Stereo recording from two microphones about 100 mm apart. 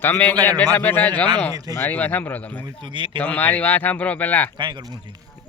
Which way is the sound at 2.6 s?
50° right (ahead or behind).